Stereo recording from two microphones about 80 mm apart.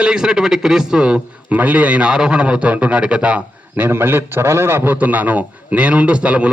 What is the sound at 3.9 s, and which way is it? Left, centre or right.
A man's voice, right.